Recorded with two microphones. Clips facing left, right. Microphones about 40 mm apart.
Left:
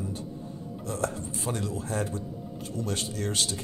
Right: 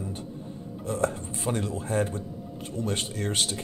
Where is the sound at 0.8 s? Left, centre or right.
Right.